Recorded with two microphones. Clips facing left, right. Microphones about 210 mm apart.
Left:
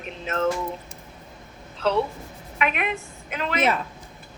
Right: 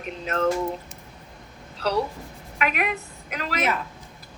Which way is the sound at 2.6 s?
40° right (ahead or behind).